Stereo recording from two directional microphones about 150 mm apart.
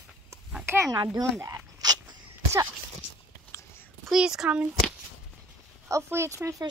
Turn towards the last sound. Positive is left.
turn(degrees=-20)  # may be behind; listen again after turning